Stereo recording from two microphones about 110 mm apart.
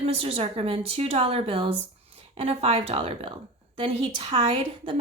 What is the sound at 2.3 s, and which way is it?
A woman's voice, 70° right (ahead or behind).